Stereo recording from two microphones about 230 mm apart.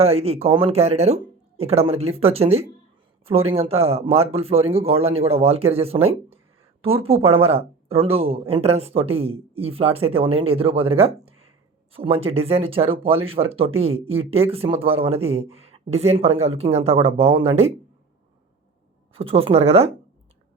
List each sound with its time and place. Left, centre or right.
0.0 s speech: right
19.1 s speech: right